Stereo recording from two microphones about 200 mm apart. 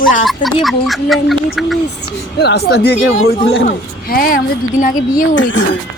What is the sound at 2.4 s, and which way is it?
Speech, 55° left (ahead or behind).